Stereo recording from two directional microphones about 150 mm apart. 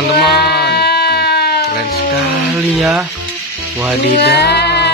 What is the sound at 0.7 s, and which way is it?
Sheep, 90° left.